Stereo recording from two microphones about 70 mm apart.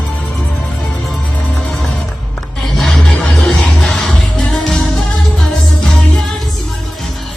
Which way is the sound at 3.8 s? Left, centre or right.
Centre.